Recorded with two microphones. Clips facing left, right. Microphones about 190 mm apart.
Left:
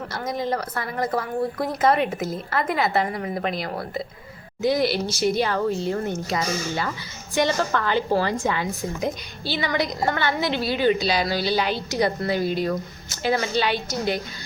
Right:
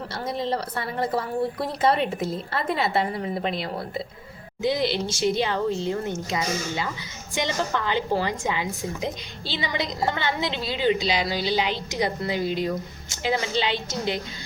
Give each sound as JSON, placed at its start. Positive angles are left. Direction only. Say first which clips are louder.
{"t": 0.1, "sound": "a woman's voice", "louder": "left 1 dB", "side_deg": -30}